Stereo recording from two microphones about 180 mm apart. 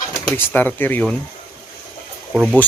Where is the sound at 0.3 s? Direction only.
10° left (ahead or behind).